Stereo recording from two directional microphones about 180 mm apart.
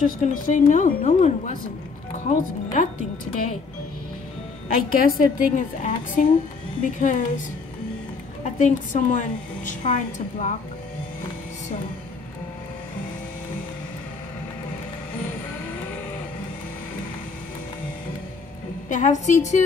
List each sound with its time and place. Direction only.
0.0 s a woman's voice: 45° left (ahead or behind)
4.9 s a woman's voice: 50° left (ahead or behind)
8.5 s a woman's voice: 45° left (ahead or behind)
18.9 s a woman's voice: 45° left (ahead or behind)